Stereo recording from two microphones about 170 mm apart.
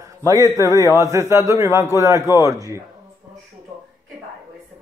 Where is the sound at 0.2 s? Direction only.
20° right (ahead or behind).